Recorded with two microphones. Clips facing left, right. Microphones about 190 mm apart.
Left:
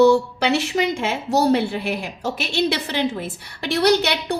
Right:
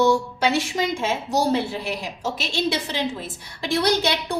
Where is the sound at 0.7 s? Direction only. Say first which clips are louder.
Left 2 dB; 65° left (ahead or behind).